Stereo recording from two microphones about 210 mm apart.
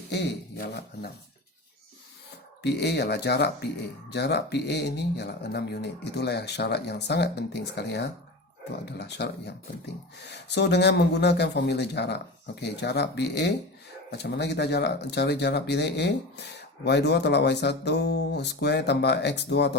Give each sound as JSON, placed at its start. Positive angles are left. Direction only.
{"t": 0.1, "sound": "speech", "side_deg": 50}
{"t": 2.6, "sound": "speech", "side_deg": 55}